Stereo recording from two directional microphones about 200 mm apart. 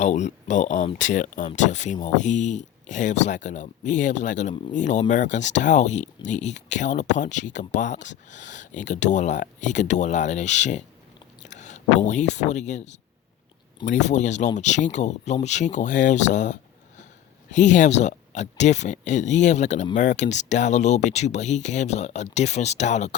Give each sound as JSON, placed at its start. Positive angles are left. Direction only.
{"t": 0.0, "sound": "speech", "side_deg": 35}